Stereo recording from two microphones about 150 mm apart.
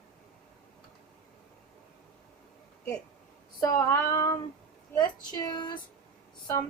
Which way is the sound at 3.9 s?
20° left (ahead or behind).